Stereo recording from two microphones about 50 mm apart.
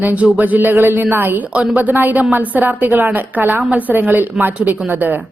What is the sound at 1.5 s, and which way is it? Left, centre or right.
A woman's voice, right.